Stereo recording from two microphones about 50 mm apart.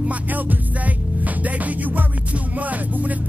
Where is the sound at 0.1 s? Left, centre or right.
Right.